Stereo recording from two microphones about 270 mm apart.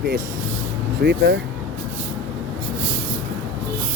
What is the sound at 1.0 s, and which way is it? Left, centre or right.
Speech, right.